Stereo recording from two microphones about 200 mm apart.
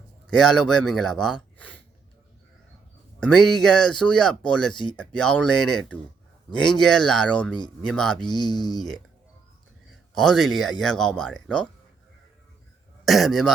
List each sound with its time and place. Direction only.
0.3 s speech: 5° left (ahead or behind)
3.2 s speech: 5° left (ahead or behind)
4.7 s speech: 25° left (ahead or behind)
4.9 s speech: 5° left (ahead or behind)
8.2 s speech: 20° left (ahead or behind)
8.7 s speech: centre (ahead or behind)
10.2 s speech: centre (ahead or behind)
13.1 s speech: centre (ahead or behind)